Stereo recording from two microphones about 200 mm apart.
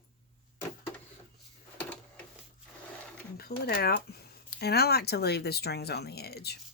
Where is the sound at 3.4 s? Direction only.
50° left (ahead or behind).